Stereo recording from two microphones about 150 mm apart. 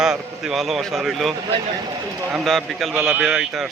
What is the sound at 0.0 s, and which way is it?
Speech, 5° right (ahead or behind).